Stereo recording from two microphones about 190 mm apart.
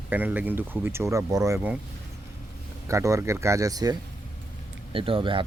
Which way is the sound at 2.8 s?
15° right (ahead or behind).